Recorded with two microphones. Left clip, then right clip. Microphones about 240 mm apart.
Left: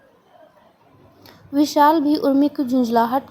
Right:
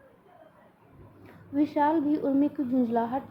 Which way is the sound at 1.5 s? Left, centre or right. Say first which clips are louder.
Left 10 dB; left.